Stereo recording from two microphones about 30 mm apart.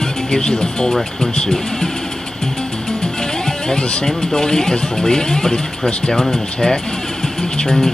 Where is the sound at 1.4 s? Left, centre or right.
Centre.